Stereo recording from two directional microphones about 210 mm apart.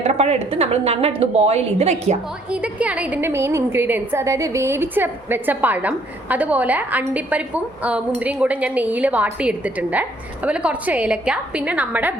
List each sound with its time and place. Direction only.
0.1 s a woman's voice: 30° right (ahead or behind)
2.5 s a woman's voice: 5° right (ahead or behind)